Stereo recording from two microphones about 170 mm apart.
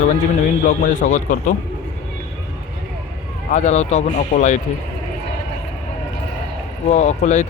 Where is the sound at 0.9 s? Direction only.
50° left (ahead or behind).